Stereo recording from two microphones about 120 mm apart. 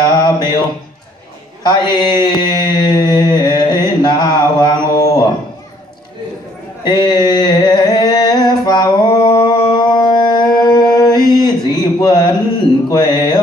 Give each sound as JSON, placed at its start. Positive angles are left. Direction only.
{"t": 0.1, "sound": "music", "side_deg": 40}
{"t": 1.7, "sound": "mantra", "side_deg": 35}
{"t": 6.8, "sound": "a sound", "side_deg": 35}
{"t": 12.9, "sound": "music", "side_deg": 35}